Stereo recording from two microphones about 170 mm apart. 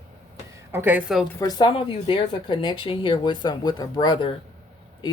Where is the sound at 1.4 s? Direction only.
25° left (ahead or behind).